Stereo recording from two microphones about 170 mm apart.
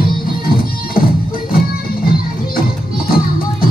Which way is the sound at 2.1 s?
60° left (ahead or behind).